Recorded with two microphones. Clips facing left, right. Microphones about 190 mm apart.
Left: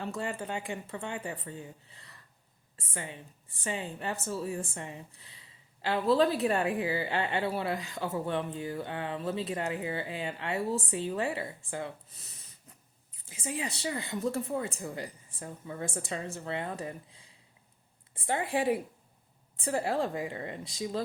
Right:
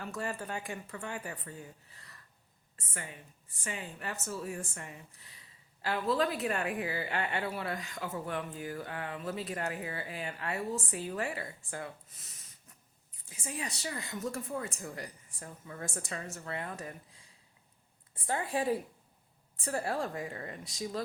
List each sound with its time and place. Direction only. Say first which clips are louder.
0.0 s a woman's voice: left 3 dB; 25° left (ahead or behind)
13.4 s a woman's voice: left 5 dB; 25° left (ahead or behind)
18.3 s a woman's voice: left 3 dB; 25° left (ahead or behind)